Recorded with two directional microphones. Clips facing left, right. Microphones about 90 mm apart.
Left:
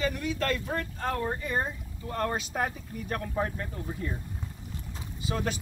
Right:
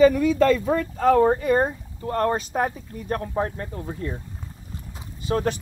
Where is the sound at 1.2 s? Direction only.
85° right; by 1.7 s 65° right (ahead or behind).